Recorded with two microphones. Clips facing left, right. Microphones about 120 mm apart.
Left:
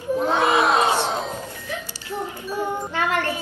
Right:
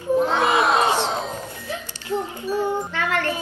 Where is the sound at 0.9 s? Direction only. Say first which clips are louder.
Even; 5° left (ahead or behind).